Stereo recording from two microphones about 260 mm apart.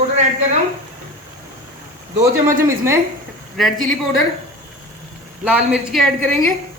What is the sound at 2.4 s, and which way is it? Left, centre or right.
Speech, centre.